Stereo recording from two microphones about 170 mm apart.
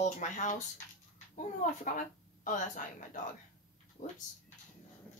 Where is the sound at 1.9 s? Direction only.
50° left (ahead or behind).